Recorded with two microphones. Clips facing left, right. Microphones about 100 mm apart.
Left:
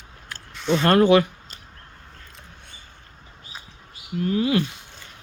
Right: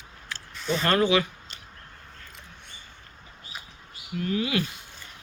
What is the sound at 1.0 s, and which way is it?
Speech, 50° left (ahead or behind).